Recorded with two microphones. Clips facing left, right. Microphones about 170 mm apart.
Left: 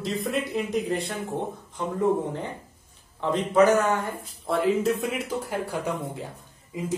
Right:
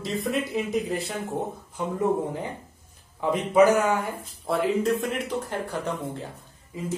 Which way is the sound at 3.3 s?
10° right (ahead or behind).